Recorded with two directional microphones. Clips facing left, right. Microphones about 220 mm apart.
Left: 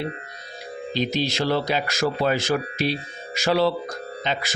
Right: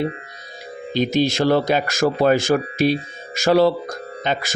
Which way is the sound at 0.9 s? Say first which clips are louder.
Right 6 dB; 50° right (ahead or behind).